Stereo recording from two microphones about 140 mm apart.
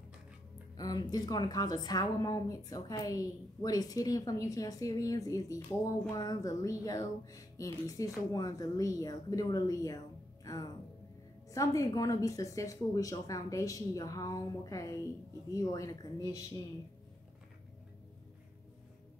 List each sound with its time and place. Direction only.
0.7 s a woman's voice: 25° left (ahead or behind)